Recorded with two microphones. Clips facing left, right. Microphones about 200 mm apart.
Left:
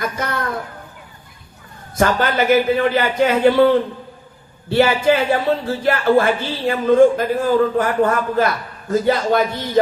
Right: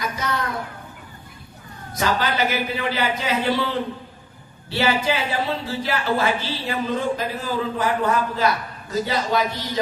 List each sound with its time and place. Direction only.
0.0 s speech: 55° left (ahead or behind)
2.0 s speech: 50° left (ahead or behind)
4.7 s speech: 55° left (ahead or behind)